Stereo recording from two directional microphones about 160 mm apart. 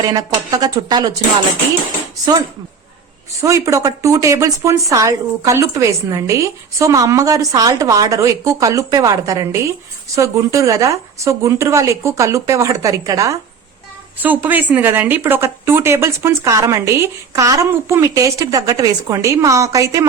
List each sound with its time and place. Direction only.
0.0 s speech: 25° right (ahead or behind)
3.4 s speech: 20° right (ahead or behind)